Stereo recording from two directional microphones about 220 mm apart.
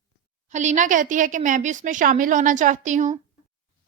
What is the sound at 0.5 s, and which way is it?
A woman's voice, 30° right (ahead or behind).